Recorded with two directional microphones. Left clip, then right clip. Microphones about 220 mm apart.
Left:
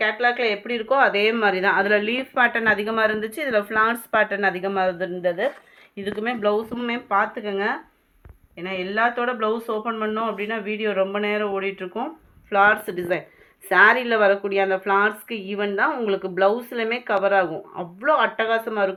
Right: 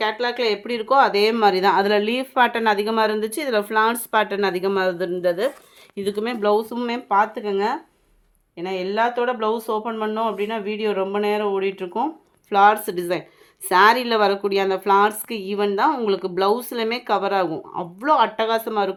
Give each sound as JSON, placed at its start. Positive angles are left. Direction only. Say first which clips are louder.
{"t": 0.0, "sound": "speech", "louder": "left 1 dB", "side_deg": -70}